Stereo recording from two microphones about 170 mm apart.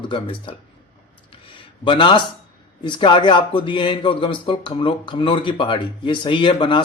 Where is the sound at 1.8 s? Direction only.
30° left (ahead or behind).